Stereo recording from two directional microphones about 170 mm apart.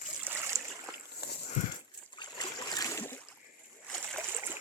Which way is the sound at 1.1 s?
70° left (ahead or behind).